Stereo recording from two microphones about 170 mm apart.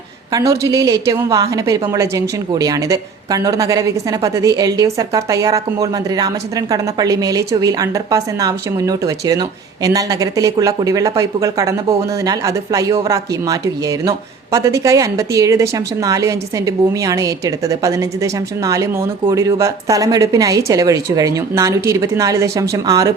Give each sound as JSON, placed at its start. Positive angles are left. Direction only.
{"t": 0.3, "sound": "a woman's voice", "side_deg": -20}